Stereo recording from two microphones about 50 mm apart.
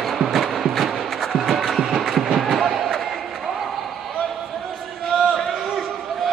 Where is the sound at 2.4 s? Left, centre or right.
Centre.